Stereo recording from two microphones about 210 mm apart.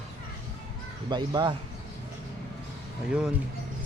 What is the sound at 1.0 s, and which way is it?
Speech, 20° right (ahead or behind).